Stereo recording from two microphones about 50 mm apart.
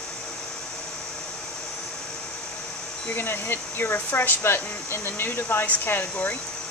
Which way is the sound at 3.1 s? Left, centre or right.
Left.